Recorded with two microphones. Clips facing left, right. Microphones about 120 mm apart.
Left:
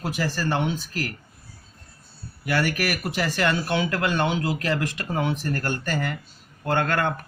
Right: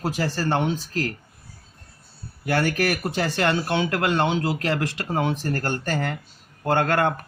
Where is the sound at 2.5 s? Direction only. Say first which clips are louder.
Right 2 dB; 35° right (ahead or behind).